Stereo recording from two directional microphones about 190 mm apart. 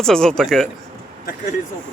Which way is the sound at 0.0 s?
5° left (ahead or behind).